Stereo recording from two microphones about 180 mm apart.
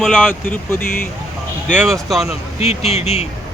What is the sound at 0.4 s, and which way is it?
Speech, 10° left (ahead or behind).